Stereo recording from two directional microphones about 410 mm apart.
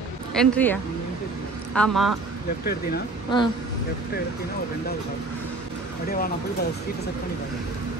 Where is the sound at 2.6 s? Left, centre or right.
Left.